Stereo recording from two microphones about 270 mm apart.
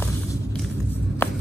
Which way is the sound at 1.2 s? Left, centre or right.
Centre.